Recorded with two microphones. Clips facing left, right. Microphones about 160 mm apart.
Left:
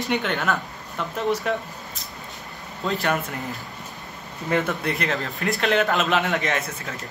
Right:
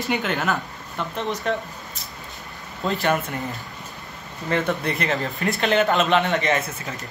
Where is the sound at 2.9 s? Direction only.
Centre (ahead or behind).